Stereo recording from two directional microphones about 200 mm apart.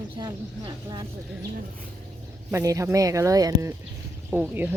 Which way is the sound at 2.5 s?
15° right (ahead or behind).